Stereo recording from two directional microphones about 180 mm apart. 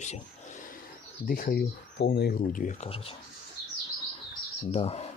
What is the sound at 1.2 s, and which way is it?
Speech, 50° left (ahead or behind).